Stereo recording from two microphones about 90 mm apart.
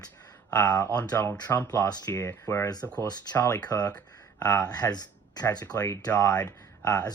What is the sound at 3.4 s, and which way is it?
Speech, 35° left (ahead or behind).